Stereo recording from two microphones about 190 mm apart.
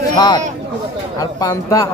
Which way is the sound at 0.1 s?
20° left (ahead or behind).